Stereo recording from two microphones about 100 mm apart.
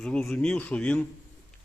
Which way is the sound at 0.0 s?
5° left (ahead or behind).